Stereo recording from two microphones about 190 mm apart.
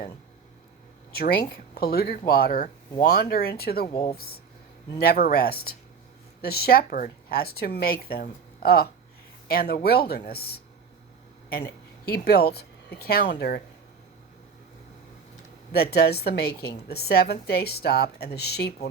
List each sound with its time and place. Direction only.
1.1 s a woman's voice: 55° left (ahead or behind)
15.7 s a woman's voice: 55° left (ahead or behind)